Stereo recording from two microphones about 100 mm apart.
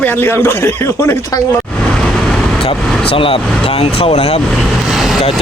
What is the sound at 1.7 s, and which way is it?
Vehicle, 5° left (ahead or behind).